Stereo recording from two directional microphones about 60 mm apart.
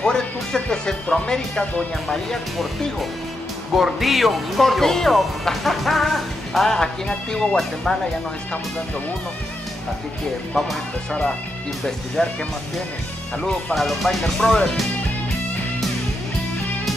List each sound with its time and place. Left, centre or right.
0.0 s speech: centre
10.5 s speech: centre
13.4 s speech: centre